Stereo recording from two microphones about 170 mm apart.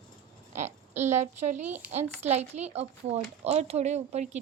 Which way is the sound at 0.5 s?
45° right (ahead or behind).